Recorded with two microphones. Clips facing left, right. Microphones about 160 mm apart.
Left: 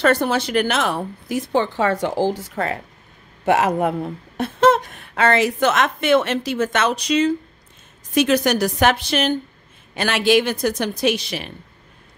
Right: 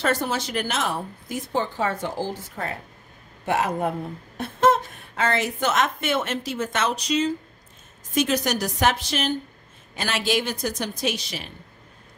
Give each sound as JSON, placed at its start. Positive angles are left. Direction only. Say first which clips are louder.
{"t": 0.0, "sound": "a woman's voice", "louder": "left 6 dB", "side_deg": 65}